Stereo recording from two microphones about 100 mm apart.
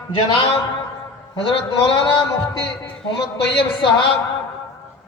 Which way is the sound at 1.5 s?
65° left (ahead or behind).